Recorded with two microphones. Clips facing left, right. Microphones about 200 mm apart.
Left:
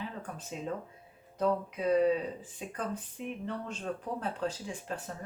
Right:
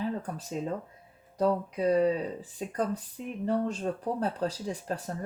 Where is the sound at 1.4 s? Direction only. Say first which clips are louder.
Right 3 dB; 35° right (ahead or behind).